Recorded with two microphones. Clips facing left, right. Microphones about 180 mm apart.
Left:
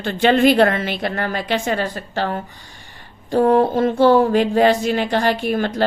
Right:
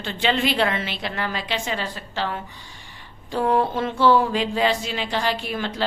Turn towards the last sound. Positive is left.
turn(degrees=50)  # may be behind; listen again after turning